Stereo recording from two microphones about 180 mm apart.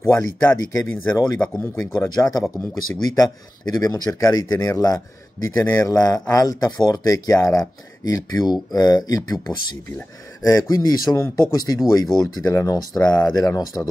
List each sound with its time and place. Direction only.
0.0 s speech: 15° left (ahead or behind)
10.4 s speech: 20° left (ahead or behind)